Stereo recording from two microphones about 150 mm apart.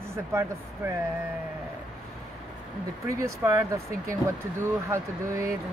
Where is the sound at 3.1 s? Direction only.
20° right (ahead or behind).